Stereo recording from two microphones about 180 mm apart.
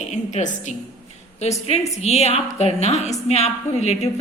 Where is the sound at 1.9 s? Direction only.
35° left (ahead or behind).